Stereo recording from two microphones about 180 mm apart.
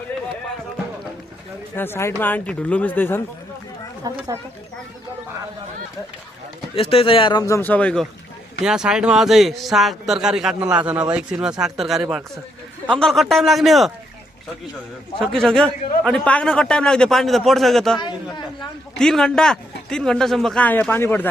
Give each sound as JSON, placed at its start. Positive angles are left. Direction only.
{"t": 1.7, "sound": "speech", "side_deg": 10}
{"t": 4.1, "sound": "speech", "side_deg": -20}
{"t": 6.7, "sound": "speech", "side_deg": 30}
{"t": 8.6, "sound": "a man's voice", "side_deg": -5}
{"t": 15.2, "sound": "a man's voice", "side_deg": 5}